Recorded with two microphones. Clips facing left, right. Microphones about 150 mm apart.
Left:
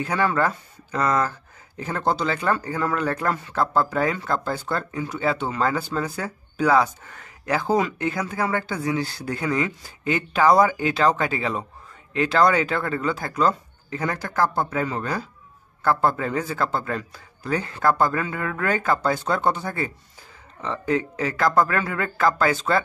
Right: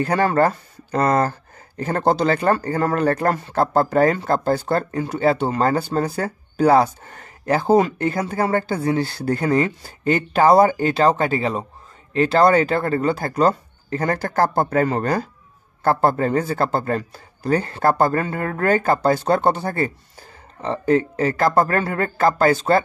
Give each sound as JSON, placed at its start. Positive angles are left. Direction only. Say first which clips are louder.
{"t": 0.0, "sound": "speech", "louder": "right 5 dB", "side_deg": -40}
{"t": 13.8, "sound": "speech", "louder": "right 5 dB", "side_deg": -50}
{"t": 15.8, "sound": "speech", "louder": "right 4 dB", "side_deg": -35}